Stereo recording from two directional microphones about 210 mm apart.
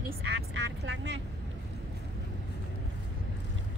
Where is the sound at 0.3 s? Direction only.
55° right (ahead or behind).